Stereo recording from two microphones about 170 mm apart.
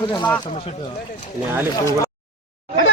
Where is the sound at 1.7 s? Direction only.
20° left (ahead or behind).